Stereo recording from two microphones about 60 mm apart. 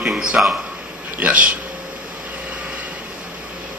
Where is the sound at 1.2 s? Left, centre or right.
Right.